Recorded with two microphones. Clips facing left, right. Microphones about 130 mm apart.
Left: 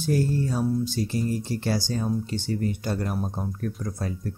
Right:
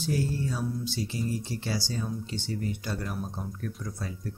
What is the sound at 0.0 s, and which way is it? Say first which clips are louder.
Speech: left 5 dB; 50° left (ahead or behind).